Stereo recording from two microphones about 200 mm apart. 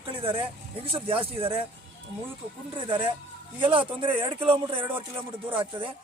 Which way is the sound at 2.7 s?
25° right (ahead or behind).